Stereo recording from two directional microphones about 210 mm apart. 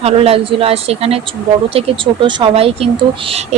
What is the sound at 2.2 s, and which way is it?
Speech, 25° right (ahead or behind).